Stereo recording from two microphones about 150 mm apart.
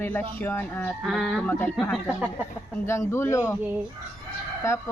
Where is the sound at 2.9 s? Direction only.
15° left (ahead or behind).